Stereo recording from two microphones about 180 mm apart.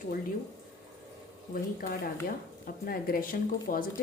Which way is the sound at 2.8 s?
55° left (ahead or behind).